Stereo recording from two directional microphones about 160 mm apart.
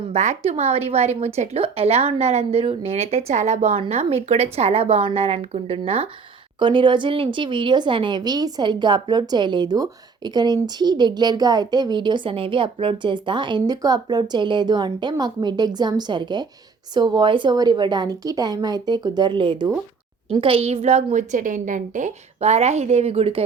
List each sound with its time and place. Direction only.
0.1 s a woman's voice: 40° right (ahead or behind)